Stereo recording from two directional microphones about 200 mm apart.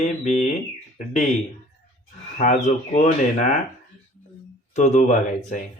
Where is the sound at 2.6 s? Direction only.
40° left (ahead or behind).